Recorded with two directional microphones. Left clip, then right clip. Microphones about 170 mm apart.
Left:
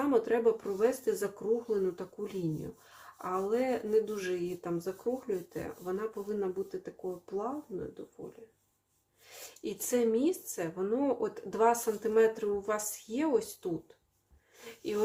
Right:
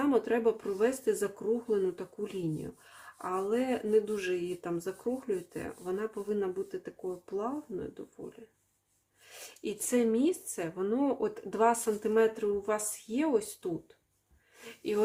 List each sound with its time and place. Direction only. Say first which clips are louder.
0.0 s speech: even; 15° right (ahead or behind)
9.6 s speech: even; 20° right (ahead or behind)
14.6 s wheeze: right 3 dB; 20° right (ahead or behind)